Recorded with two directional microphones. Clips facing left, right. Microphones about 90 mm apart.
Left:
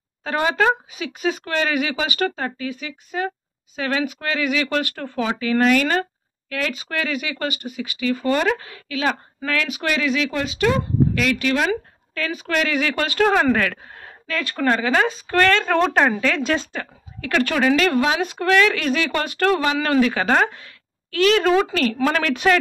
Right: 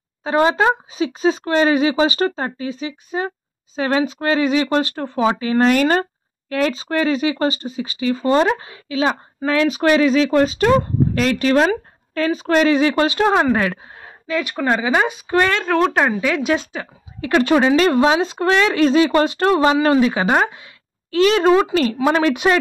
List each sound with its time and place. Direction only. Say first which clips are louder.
0.2 s speech: right 4 dB; 25° right (ahead or behind)
15.6 s speech: right 1 dB; centre (ahead or behind)
17.2 s speech: right 5 dB; 25° right (ahead or behind)
21.1 s speech: right 3 dB; 25° right (ahead or behind)